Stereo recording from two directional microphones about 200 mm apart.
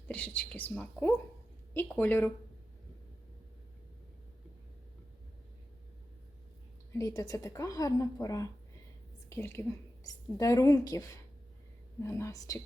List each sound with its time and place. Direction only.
0.1 s a woman's voice: 5° left (ahead or behind)
6.9 s a woman's voice: 15° left (ahead or behind)
12.0 s a woman's voice: 15° left (ahead or behind)